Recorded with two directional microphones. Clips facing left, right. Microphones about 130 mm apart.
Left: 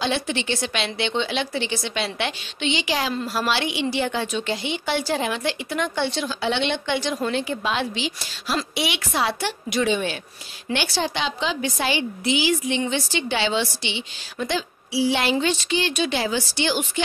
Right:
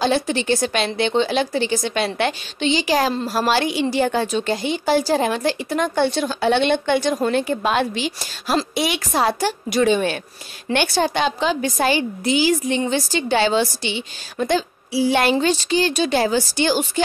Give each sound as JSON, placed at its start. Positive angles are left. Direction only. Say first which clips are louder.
{"t": 0.0, "sound": "a woman's voice", "louder": "right 5 dB", "side_deg": -40}
{"t": 15.3, "sound": "a woman's voice", "louder": "right 4 dB", "side_deg": -35}